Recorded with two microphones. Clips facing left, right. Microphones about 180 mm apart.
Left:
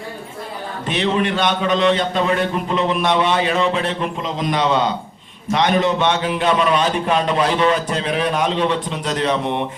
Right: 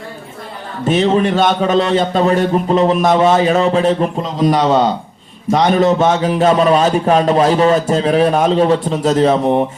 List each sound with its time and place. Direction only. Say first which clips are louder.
0.9 s speech: right 7 dB; 40° right (ahead or behind)